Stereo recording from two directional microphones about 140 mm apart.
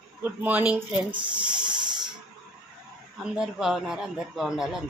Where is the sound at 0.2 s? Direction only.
15° right (ahead or behind).